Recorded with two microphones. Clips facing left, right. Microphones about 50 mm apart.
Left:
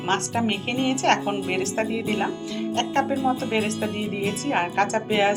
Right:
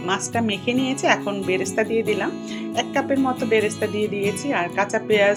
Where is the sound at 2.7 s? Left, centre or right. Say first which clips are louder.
Right 1 dB; centre.